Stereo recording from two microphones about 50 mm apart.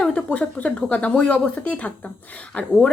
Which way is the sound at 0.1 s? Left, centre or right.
Left.